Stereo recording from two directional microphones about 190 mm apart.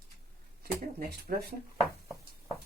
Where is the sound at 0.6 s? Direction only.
50° right (ahead or behind).